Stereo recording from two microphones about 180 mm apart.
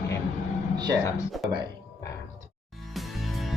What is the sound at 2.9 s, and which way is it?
Music, centre (ahead or behind).